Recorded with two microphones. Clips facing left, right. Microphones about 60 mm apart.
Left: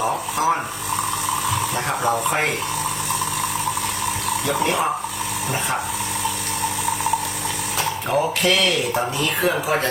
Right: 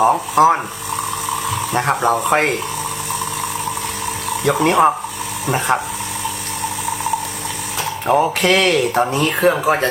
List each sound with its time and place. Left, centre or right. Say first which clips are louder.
0.0 s speech: right 9 dB; right
1.3 s water: right 1 dB; centre
1.7 s speech: right 9 dB; right
4.6 s speech: right 9 dB; right
6.6 s a sound: right 1 dB; centre
8.0 s speech: right 6 dB; right